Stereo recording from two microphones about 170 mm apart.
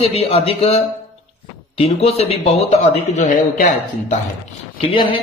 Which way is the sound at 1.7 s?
35° left (ahead or behind).